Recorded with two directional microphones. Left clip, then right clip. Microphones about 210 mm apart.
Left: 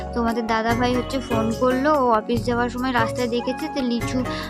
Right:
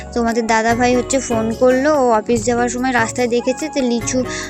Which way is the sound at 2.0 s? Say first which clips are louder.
Right 5 dB; 10° right (ahead or behind).